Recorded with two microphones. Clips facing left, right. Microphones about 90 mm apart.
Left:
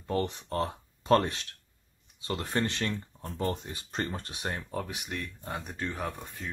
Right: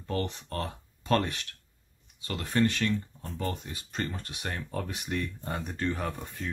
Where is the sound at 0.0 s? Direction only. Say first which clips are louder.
Left 2 dB; 20° left (ahead or behind).